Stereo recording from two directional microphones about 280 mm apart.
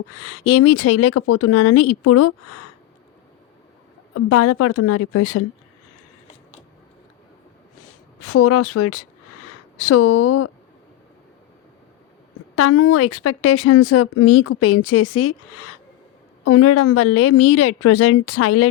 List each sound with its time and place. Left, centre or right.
0.1 s a woman's voice: left
4.1 s a woman's voice: left
8.2 s a woman's voice: left
12.5 s a woman's voice: left